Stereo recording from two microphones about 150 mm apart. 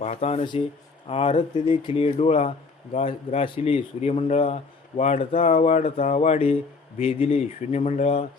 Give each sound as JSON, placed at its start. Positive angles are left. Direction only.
{"t": 0.0, "sound": "speech", "side_deg": 45}